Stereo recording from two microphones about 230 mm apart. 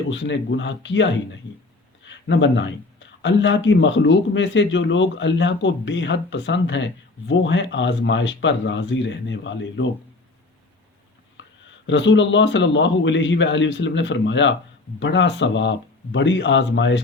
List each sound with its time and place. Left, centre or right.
0.1 s speech: left
11.4 s a sound: left
11.9 s speech: left